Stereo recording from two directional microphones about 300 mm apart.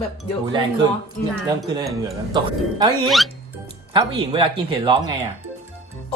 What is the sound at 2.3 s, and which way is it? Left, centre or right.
Speech, centre.